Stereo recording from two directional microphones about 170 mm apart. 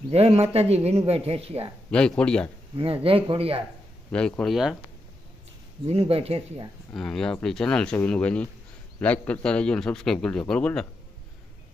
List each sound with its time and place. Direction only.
0.1 s speech: 35° right (ahead or behind)
1.9 s a man's voice: 5° left (ahead or behind)
2.7 s speech: 35° right (ahead or behind)
4.1 s a man's voice: 5° left (ahead or behind)
5.9 s speech: 35° right (ahead or behind)
6.9 s a man's voice: 5° left (ahead or behind)